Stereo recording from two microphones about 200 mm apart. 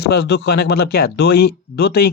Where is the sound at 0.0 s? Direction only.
55° left (ahead or behind).